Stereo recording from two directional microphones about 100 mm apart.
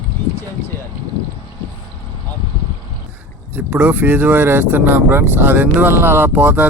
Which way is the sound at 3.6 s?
15° right (ahead or behind).